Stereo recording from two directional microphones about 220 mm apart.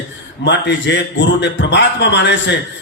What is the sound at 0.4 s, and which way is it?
A man's voice, 50° left (ahead or behind).